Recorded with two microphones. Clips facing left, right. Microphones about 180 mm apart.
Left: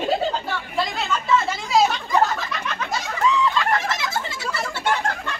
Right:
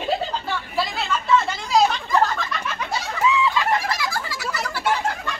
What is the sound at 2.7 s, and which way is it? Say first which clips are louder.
Snicker: left 1 dB; 5° right (ahead or behind).